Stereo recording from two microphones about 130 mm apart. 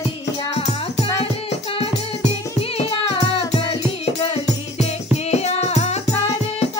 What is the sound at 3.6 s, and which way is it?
Music, 45° left (ahead or behind).